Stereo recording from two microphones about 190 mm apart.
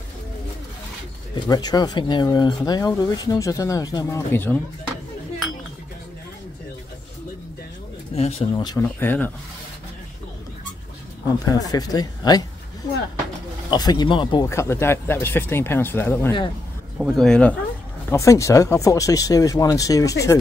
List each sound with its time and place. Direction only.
1.3 s speech: 20° left (ahead or behind)
8.1 s speech: 30° left (ahead or behind)
8.8 s speech: 10° left (ahead or behind)
11.4 s speech: 20° left (ahead or behind)
13.7 s speech: 20° left (ahead or behind); by 17.6 s 5° left (ahead or behind)
18.1 s speech: 15° left (ahead or behind)